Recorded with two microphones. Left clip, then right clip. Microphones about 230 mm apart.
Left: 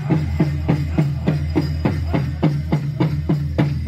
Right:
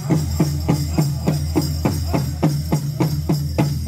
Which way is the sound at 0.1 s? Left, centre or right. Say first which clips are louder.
Even; centre.